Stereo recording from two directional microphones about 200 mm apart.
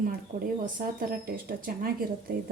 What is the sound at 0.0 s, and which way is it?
Speech, 45° right (ahead or behind).